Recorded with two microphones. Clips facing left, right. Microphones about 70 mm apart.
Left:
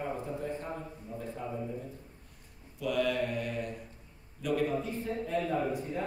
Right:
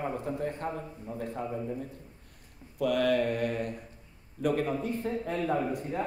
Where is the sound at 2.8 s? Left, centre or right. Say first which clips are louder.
Right 4 dB; right.